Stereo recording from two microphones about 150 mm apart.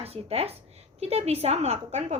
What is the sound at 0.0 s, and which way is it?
A woman's voice, 45° right (ahead or behind).